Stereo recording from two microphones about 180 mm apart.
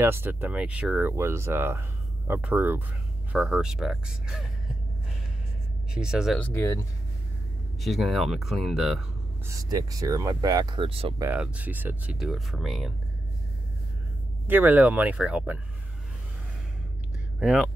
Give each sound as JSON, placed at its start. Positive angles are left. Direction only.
{"t": 0.0, "sound": "speech", "side_deg": -10}
{"t": 5.9, "sound": "speech", "side_deg": -5}
{"t": 6.4, "sound": "speech", "side_deg": 15}
{"t": 7.8, "sound": "speech", "side_deg": 0}
{"t": 9.5, "sound": "speech", "side_deg": -20}
{"t": 11.1, "sound": "speech", "side_deg": -10}
{"t": 14.5, "sound": "speech", "side_deg": -10}
{"t": 17.4, "sound": "speech", "side_deg": -5}